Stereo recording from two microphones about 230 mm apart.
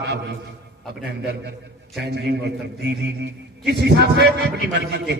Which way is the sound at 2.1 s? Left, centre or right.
Right.